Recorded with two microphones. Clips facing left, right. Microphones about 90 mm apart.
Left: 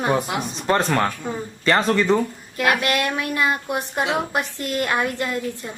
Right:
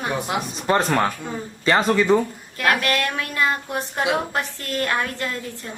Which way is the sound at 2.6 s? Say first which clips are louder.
Left 1 dB; 20° left (ahead or behind).